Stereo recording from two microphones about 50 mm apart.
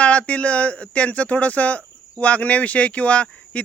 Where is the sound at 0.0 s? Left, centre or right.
Left.